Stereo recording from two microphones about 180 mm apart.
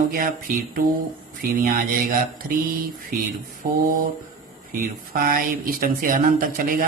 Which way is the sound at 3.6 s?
55° right (ahead or behind).